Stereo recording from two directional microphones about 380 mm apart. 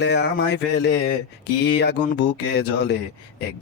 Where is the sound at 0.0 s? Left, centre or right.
Left.